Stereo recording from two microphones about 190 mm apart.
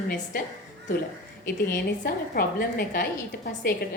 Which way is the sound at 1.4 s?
55° left (ahead or behind).